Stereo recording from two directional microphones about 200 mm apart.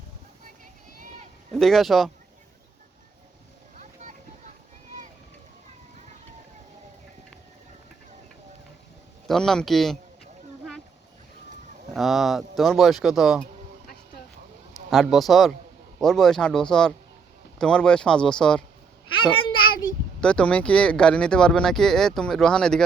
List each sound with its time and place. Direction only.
1.5 s speech: centre (ahead or behind)
3.8 s a sound: 40° right (ahead or behind)
9.2 s speech: centre (ahead or behind)
11.9 s speech: centre (ahead or behind)
14.7 s a man's voice: centre (ahead or behind)
20.2 s speech: 5° left (ahead or behind)